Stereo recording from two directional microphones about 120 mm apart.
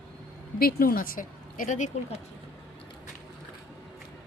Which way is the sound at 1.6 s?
90° left.